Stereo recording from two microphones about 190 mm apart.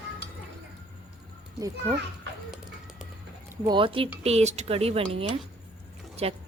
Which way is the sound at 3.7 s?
25° right (ahead or behind).